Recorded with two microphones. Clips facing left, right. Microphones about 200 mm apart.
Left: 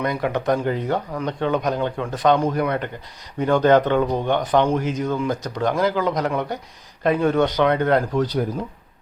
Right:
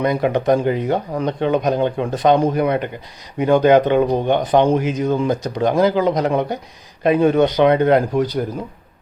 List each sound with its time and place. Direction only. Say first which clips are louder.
0.0 s speech: right 5 dB; 20° right (ahead or behind)